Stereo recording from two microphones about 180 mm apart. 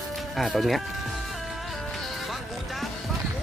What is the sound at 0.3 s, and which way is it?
Speech, centre (ahead or behind).